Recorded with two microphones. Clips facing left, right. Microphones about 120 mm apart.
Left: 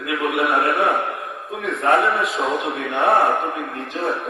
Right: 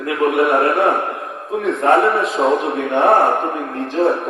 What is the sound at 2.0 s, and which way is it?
A man's voice, 30° right (ahead or behind).